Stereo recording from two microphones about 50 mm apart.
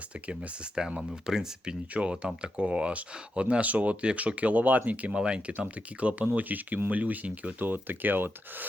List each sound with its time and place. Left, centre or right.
0.1 s speech: right
1.9 s speech: right
5.1 s speech: centre
5.5 s speech: right
7.6 s speech: right